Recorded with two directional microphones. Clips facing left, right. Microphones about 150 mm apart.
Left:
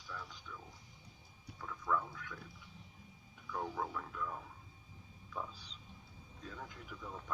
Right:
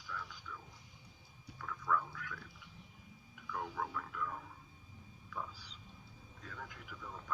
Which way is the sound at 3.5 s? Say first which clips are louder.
Left 1 dB; 25° left (ahead or behind).